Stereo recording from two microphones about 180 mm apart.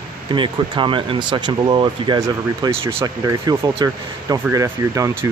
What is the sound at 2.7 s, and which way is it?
Speech, 30° right (ahead or behind).